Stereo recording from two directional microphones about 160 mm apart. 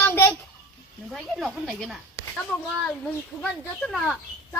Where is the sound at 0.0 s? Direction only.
15° left (ahead or behind).